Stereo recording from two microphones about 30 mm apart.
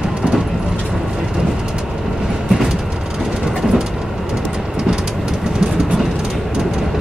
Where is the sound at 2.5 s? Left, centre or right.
Centre.